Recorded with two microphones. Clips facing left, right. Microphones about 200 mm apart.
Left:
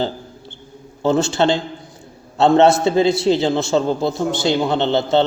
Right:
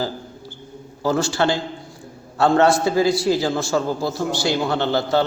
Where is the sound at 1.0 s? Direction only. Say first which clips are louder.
Left 3 dB; 25° left (ahead or behind).